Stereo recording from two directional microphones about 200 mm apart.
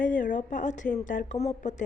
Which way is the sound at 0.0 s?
40° left (ahead or behind).